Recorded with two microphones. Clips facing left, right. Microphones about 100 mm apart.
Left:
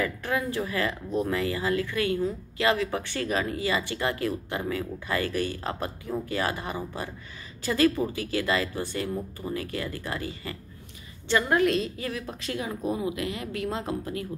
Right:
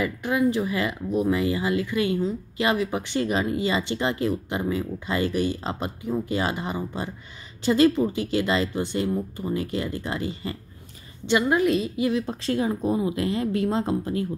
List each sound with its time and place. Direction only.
0.0 s speech: 15° right (ahead or behind)
11.2 s a woman's voice: 10° right (ahead or behind)
12.0 s speech: 25° right (ahead or behind)